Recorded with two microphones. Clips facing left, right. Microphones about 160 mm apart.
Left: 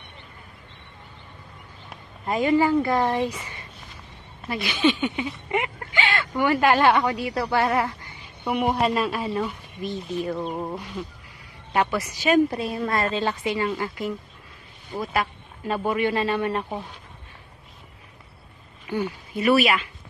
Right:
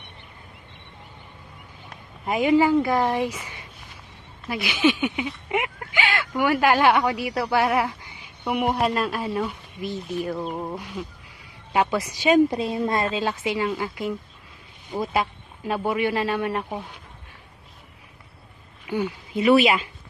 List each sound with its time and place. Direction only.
2.2 s speech: 10° right (ahead or behind)
13.1 s speech: 10° right (ahead or behind)
18.9 s speech: 15° right (ahead or behind)